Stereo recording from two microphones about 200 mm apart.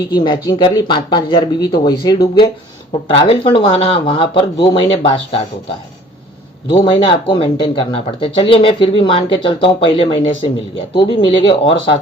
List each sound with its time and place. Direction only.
0.1 s speech: 20° left (ahead or behind)
6.7 s speech: 25° left (ahead or behind)